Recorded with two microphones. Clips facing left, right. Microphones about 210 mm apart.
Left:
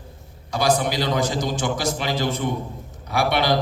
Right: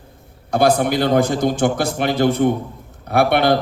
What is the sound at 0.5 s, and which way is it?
Mantra, 55° right (ahead or behind).